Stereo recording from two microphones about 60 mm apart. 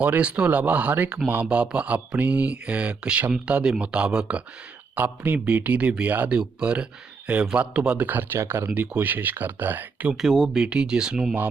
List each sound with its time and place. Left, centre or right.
0.0 s speech: right
1.5 s speech: centre
4.9 s speech: right
8.0 s speech: right
8.7 s speech: right
10.1 s speech: centre
10.5 s speech: centre